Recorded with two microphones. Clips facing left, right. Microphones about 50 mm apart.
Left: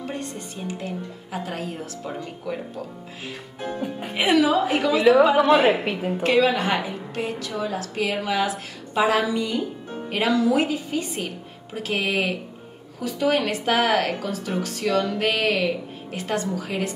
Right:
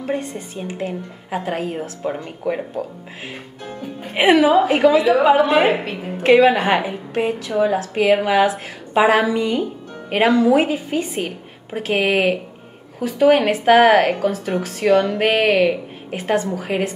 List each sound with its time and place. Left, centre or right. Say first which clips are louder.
0.0 s a woman's voice: right 7 dB; right
3.6 s speech: left 3 dB; centre
4.1 s a woman's voice: right 6 dB; right
5.3 s a woman's voice: right 3 dB; centre
6.2 s a woman's voice: right 7 dB; right